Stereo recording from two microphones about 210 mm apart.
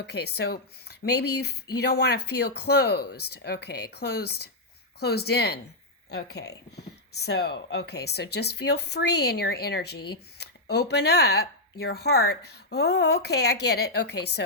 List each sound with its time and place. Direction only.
0.0 s speech: 50° left (ahead or behind)